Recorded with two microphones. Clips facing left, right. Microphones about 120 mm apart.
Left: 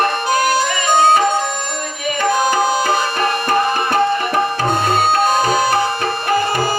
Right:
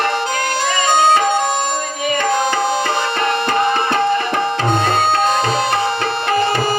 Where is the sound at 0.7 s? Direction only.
20° right (ahead or behind).